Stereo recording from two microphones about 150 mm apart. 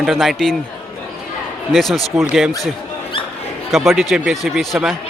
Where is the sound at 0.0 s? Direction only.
Centre (ahead or behind).